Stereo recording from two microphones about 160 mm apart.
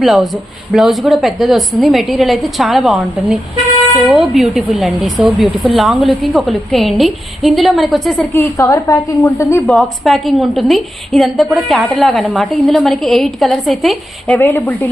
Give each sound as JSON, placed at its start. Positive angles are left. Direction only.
{"t": 0.0, "sound": "a woman's voice", "side_deg": 0}
{"t": 8.3, "sound": "a woman's voice", "side_deg": 15}
{"t": 9.6, "sound": "a woman's voice", "side_deg": 0}
{"t": 14.3, "sound": "speech", "side_deg": 10}